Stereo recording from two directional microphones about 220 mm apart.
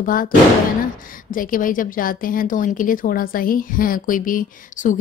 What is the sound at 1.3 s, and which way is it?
Speech, 40° left (ahead or behind).